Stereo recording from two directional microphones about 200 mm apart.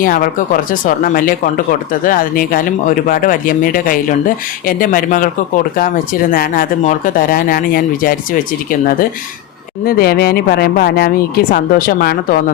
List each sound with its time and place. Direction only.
0.0 s speech: 45° left (ahead or behind)